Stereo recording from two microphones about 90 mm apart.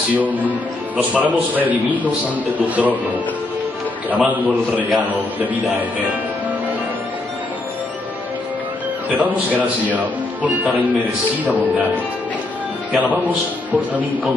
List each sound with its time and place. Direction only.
0.1 s a man's voice: 20° right (ahead or behind)
4.1 s a man's voice: 15° right (ahead or behind)
9.1 s a man's voice: 15° right (ahead or behind)
12.9 s a man's voice: 15° right (ahead or behind)